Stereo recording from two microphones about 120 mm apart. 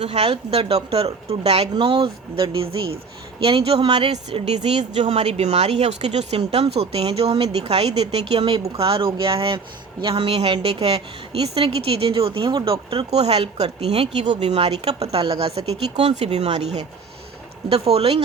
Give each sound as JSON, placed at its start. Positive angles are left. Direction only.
{"t": 0.0, "sound": "a woman's voice", "side_deg": -60}
{"t": 1.7, "sound": "a woman's voice", "side_deg": -45}
{"t": 13.1, "sound": "a woman's voice", "side_deg": -60}